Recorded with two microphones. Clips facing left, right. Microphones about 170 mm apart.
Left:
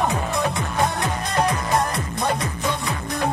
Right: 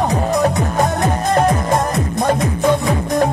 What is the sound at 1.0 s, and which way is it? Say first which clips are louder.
Music: right 7 dB; 45° right (ahead or behind).